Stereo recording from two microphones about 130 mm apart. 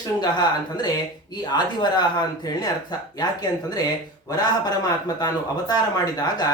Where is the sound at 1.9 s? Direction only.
35° left (ahead or behind).